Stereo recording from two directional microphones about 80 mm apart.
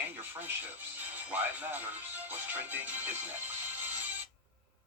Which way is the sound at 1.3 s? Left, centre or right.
Right.